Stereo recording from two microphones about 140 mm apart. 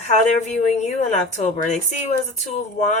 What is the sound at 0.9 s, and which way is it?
A woman's voice, 55° left (ahead or behind).